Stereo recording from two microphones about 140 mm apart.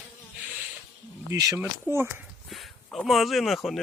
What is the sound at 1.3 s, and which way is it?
Speech, 25° right (ahead or behind).